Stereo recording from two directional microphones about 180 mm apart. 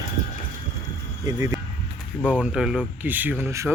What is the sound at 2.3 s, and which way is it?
Speech, 5° right (ahead or behind).